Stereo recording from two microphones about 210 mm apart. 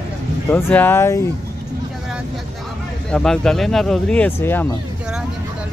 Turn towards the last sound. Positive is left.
turn(degrees=10)  # may be behind; listen again after turning